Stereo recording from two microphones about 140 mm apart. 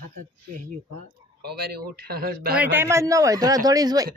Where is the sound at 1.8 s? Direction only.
90° right.